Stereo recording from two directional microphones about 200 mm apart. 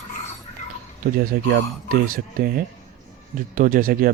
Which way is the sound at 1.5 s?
45° right (ahead or behind).